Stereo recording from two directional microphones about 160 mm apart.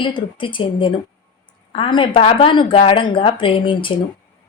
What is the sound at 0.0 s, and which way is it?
A woman's voice, 30° left (ahead or behind).